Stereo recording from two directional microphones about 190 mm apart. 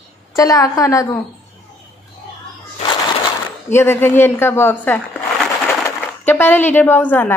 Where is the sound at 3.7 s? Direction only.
10° left (ahead or behind).